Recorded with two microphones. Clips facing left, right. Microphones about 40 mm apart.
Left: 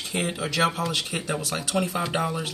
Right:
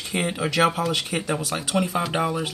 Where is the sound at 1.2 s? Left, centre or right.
Centre.